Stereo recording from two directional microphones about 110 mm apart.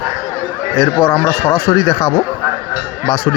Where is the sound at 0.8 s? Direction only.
40° left (ahead or behind).